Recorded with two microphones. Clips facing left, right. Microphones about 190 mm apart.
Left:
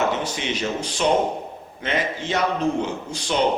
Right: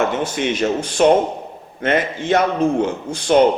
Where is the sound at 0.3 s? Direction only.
55° right (ahead or behind).